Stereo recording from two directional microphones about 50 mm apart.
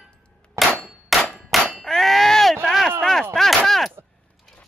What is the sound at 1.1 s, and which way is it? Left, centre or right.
Clang, centre.